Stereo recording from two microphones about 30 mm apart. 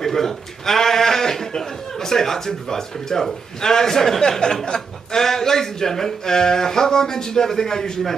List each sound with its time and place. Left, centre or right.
0.0 s a man's voice: centre